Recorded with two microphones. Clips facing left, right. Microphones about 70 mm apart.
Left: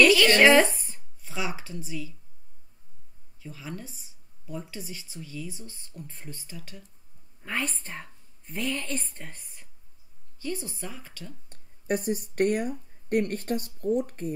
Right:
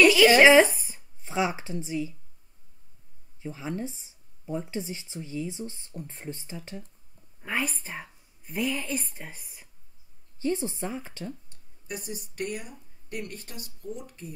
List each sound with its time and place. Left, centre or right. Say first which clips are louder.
0.0 s speech: right 2 dB; centre
1.2 s speech: right 6 dB; right
3.3 s speech: right 6 dB; right
7.4 s a woman's voice: right 1 dB; centre
10.4 s speech: right 6 dB; right
11.4 s speech: left 11 dB; left